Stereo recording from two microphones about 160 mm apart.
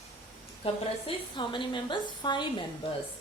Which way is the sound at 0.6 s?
30° left (ahead or behind).